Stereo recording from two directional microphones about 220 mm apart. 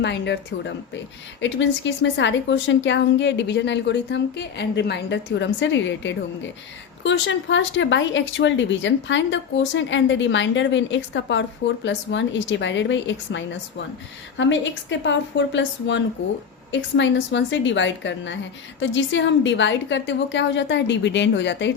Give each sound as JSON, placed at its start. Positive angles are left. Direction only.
{"t": 0.0, "sound": "a woman's voice", "side_deg": 50}